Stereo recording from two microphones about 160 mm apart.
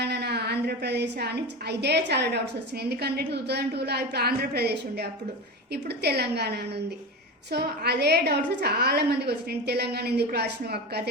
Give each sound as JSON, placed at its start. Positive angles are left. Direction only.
{"t": 0.0, "sound": "a woman's voice", "side_deg": -90}